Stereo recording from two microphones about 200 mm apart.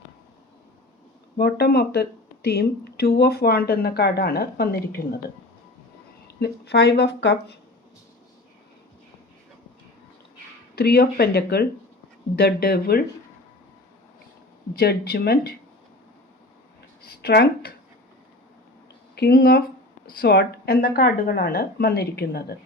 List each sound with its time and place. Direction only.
1.4 s speech: 55° left (ahead or behind)
6.2 s speech: 55° left (ahead or behind)
10.8 s speech: 50° left (ahead or behind)
14.8 s speech: 50° left (ahead or behind)
17.2 s speech: 55° left (ahead or behind)
19.1 s speech: 50° left (ahead or behind)